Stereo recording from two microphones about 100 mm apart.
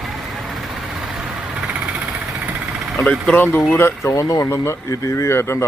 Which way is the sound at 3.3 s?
20° left (ahead or behind).